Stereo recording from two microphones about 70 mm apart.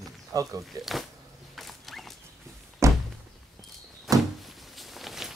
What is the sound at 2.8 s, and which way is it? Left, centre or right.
Thunk, right.